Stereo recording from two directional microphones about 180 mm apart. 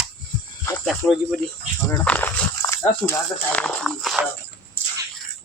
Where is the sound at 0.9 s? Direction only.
Centre (ahead or behind).